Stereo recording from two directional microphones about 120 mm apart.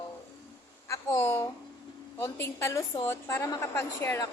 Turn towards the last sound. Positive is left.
turn(degrees=20)  # may be behind; listen again after turning